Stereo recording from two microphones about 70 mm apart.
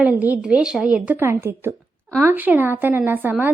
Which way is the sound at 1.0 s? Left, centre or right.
Right.